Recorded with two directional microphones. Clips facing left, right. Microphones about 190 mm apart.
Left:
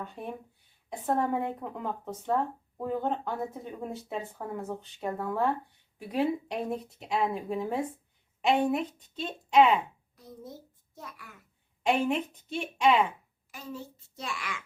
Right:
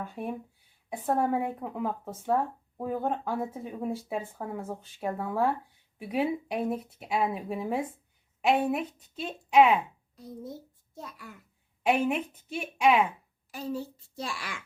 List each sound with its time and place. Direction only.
0.0 s a woman's voice: 10° right (ahead or behind)
10.9 s a child's voice: 30° right (ahead or behind)
11.8 s speech: 5° right (ahead or behind)
13.5 s a child's voice: 35° right (ahead or behind)